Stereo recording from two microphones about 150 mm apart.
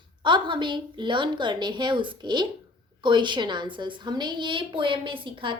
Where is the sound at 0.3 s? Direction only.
30° right (ahead or behind).